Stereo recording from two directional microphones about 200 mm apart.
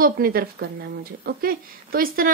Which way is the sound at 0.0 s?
45° right (ahead or behind).